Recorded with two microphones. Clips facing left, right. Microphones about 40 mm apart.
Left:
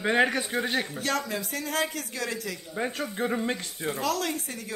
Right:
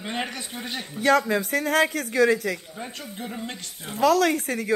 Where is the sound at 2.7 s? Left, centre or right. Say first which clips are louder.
Left 5 dB; left.